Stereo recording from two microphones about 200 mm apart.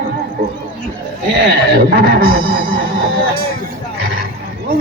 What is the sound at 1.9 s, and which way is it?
Speech, 50° right (ahead or behind).